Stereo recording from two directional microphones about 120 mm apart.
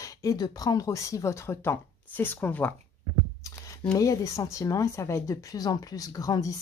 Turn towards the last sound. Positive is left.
turn(degrees=30)  # may be behind; listen again after turning